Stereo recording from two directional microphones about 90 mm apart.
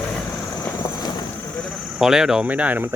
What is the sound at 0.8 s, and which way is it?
Boat, 40° left (ahead or behind).